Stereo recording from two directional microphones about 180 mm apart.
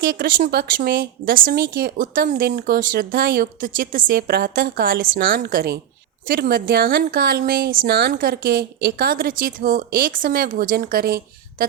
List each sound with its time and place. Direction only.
0.0 s a woman's voice: 55° right (ahead or behind)